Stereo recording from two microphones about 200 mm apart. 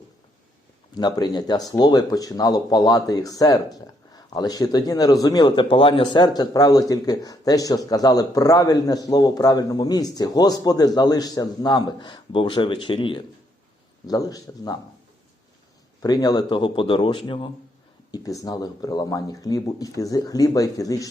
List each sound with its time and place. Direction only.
0.9 s speech: 20° left (ahead or behind)
16.0 s speech: 20° left (ahead or behind)